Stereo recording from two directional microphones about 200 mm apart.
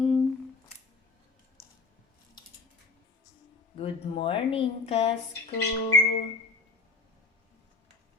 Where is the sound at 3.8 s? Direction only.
25° left (ahead or behind).